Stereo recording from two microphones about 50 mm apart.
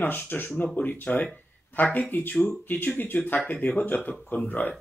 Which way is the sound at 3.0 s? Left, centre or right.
Left.